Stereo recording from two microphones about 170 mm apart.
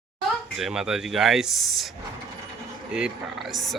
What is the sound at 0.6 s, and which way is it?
Speech, 5° right (ahead or behind).